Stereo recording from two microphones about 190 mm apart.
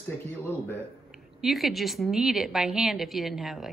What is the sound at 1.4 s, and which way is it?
A woman's voice, centre (ahead or behind).